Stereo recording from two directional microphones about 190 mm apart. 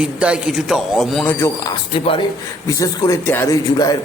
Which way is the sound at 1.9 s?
25° left (ahead or behind).